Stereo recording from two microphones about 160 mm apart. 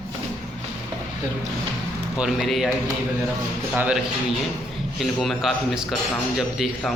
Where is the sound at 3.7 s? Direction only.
5° right (ahead or behind).